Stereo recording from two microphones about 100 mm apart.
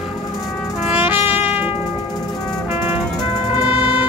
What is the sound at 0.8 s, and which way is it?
Trumpet, 15° right (ahead or behind).